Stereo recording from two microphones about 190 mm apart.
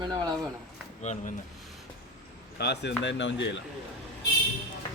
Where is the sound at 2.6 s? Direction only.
60° left (ahead or behind).